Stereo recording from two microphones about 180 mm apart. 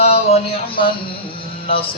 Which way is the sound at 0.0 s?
35° left (ahead or behind).